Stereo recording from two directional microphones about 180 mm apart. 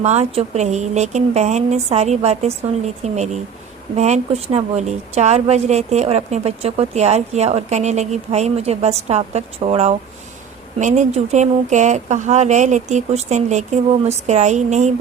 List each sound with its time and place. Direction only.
0.0 s a woman's voice: 40° right (ahead or behind)